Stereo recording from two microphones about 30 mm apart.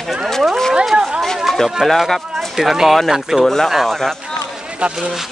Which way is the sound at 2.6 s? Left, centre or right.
Centre.